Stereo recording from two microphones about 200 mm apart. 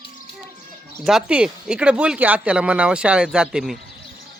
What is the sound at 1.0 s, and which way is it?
Speech, 5° right (ahead or behind).